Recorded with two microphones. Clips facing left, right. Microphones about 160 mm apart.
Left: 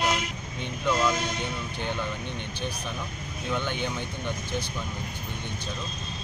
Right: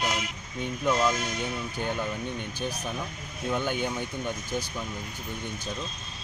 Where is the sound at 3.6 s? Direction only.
40° right (ahead or behind).